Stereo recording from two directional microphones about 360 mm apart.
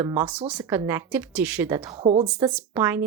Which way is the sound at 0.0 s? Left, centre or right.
Centre.